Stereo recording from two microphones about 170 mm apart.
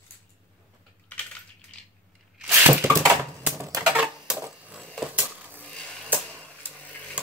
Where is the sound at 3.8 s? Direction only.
5° right (ahead or behind).